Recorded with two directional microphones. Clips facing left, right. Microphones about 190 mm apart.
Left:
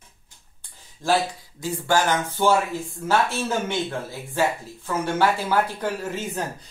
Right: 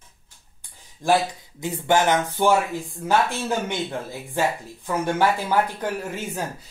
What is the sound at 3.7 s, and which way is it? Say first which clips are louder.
Speech: left 1 dB; 15° right (ahead or behind).